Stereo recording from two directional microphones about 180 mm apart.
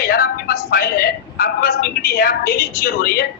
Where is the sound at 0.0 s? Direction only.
55° left (ahead or behind).